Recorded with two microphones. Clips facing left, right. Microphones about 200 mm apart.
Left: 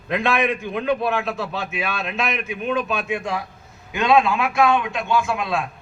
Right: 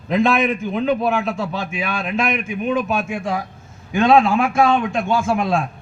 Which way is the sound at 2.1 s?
50° right (ahead or behind).